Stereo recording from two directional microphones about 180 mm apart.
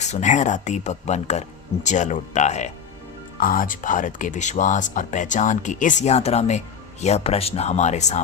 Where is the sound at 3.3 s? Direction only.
50° left (ahead or behind).